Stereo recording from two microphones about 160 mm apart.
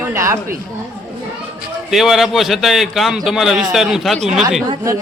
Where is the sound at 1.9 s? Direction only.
Centre (ahead or behind).